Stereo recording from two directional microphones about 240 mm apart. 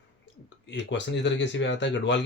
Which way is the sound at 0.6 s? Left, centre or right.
Left.